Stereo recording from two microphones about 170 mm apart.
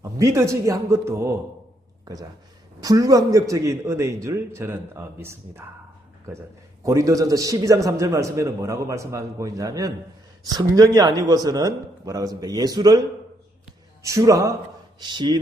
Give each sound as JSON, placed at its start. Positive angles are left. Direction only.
{"t": 0.2, "sound": "a man's voice", "side_deg": -20}
{"t": 2.8, "sound": "a man's voice", "side_deg": -20}
{"t": 6.8, "sound": "a man's voice", "side_deg": -20}
{"t": 14.0, "sound": "a man's voice", "side_deg": -20}